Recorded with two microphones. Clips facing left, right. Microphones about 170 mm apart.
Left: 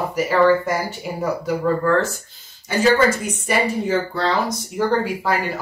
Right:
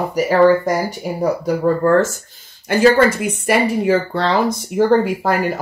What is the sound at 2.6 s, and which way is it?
Speech, 60° right (ahead or behind).